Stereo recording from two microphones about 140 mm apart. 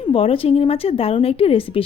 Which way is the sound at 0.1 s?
40° left (ahead or behind).